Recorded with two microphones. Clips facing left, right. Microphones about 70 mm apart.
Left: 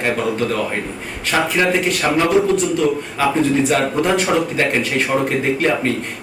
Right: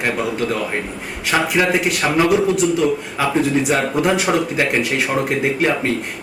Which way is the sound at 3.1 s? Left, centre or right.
Centre.